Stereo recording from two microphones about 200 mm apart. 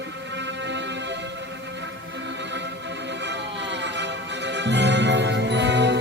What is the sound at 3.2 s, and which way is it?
Music, 60° right (ahead or behind).